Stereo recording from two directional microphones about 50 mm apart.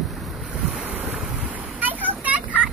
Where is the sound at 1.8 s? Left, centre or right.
Right.